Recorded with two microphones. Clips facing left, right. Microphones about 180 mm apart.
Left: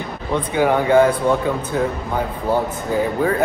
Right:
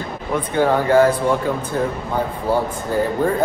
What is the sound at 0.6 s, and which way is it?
Speech, 15° left (ahead or behind).